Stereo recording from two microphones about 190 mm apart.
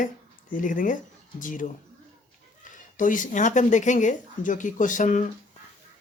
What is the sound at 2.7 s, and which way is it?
Speech, 45° left (ahead or behind).